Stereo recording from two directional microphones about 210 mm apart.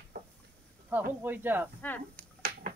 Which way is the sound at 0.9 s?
10° right (ahead or behind).